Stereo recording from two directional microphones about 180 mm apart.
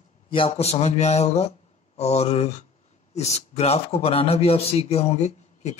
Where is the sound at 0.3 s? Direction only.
30° left (ahead or behind).